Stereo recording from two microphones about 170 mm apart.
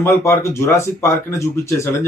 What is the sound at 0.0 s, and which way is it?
Speech, 15° left (ahead or behind).